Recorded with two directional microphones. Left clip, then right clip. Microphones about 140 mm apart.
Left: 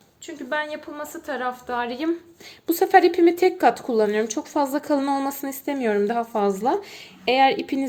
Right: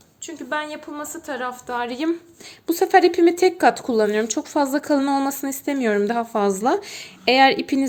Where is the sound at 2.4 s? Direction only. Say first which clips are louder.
Right 1 dB; 15° right (ahead or behind).